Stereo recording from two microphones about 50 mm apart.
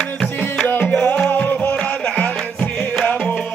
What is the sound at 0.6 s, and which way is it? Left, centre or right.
Music, left.